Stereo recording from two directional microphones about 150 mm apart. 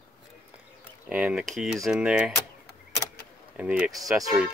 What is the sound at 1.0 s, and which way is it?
Speech, 10° right (ahead or behind).